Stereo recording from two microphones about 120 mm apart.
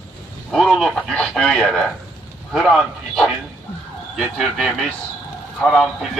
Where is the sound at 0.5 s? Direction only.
Centre (ahead or behind).